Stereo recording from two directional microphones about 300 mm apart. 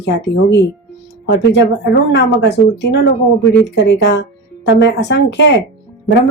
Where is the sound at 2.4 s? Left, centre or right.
Left.